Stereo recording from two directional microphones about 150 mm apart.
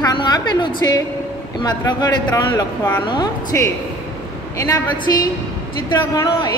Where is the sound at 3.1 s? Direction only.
25° left (ahead or behind).